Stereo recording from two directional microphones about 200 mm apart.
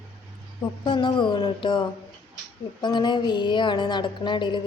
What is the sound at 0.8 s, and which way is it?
A woman's voice, 25° left (ahead or behind).